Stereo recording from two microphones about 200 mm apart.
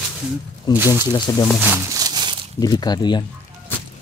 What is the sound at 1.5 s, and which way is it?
Speech, 5° right (ahead or behind).